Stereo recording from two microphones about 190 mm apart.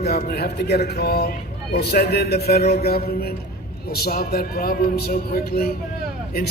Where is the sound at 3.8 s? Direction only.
55° left (ahead or behind).